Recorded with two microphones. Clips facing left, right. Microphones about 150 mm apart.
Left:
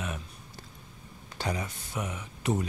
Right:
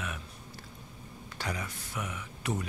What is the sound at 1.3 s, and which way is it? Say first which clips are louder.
Speech: left 4 dB; 25° left (ahead or behind).